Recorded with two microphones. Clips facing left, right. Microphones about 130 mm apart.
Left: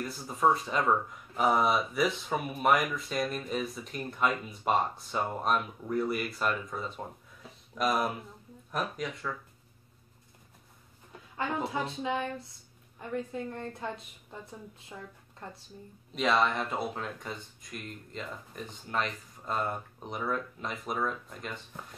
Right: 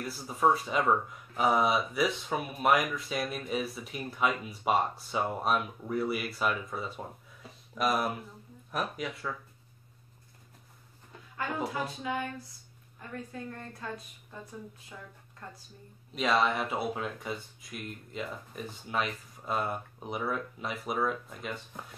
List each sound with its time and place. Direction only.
0.0 s speech: 5° right (ahead or behind)
7.4 s a sound: centre (ahead or behind)
8.7 s speech: 5° right (ahead or behind)
11.3 s a woman's voice: 25° left (ahead or behind)
16.2 s speech: centre (ahead or behind)